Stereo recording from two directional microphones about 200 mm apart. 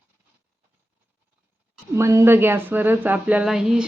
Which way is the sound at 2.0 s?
15° right (ahead or behind).